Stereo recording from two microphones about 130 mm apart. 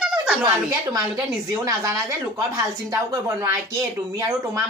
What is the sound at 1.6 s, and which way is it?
Speech, 25° right (ahead or behind).